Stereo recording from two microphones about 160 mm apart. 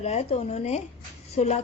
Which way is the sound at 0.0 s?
40° left (ahead or behind).